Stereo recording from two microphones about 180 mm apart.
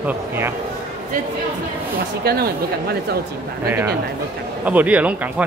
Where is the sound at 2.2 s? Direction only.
60° right (ahead or behind).